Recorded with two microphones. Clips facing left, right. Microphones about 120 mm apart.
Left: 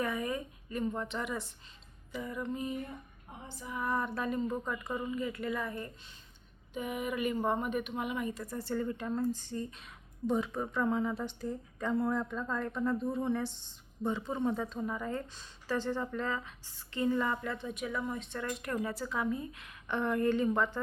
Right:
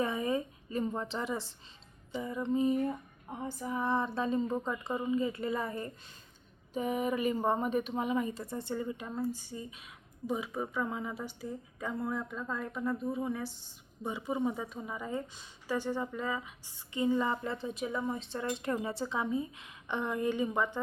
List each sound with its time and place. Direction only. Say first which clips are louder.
0.0 s a woman's voice: right 3 dB; 25° right (ahead or behind)
3.2 s female singing: right 8 dB; 45° right (ahead or behind)
3.8 s speech: right 2 dB; 25° right (ahead or behind)